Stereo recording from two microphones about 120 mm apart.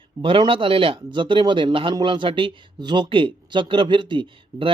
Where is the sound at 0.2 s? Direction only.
45° right (ahead or behind).